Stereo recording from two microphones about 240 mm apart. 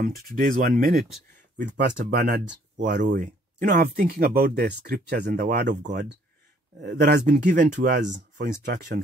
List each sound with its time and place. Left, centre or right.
0.4 s speech: right
1.6 s speech: right
7.7 s speech: right